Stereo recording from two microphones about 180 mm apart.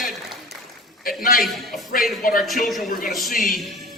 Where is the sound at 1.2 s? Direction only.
50° left (ahead or behind).